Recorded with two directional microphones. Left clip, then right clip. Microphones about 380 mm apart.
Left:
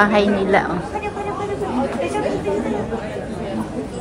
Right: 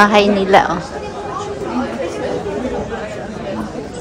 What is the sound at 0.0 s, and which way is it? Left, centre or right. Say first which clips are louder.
Speech: right 5 dB; centre.